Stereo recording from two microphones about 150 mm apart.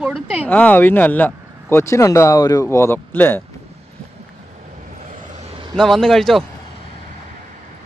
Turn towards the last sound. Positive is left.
turn(degrees=0)  # may be behind; listen again after turning